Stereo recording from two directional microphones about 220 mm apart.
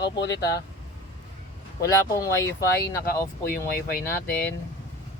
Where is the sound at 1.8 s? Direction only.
15° left (ahead or behind).